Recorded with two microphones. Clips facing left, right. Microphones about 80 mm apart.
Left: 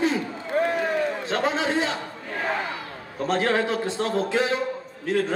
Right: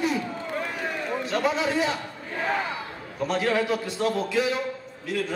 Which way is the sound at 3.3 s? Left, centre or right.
Left.